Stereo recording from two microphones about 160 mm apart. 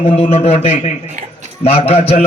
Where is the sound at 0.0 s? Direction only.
40° left (ahead or behind).